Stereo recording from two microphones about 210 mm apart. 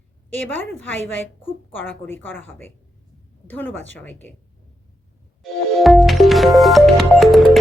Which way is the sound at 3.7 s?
65° left (ahead or behind).